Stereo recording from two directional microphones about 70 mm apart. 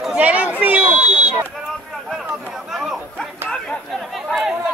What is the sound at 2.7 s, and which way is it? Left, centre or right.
Chatter, centre.